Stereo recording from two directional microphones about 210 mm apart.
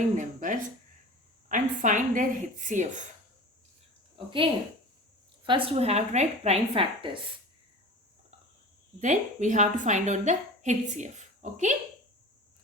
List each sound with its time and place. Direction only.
0.2 s a woman's voice: 35° right (ahead or behind)
5.5 s a woman's voice: 25° right (ahead or behind)
9.0 s a woman's voice: 35° right (ahead or behind)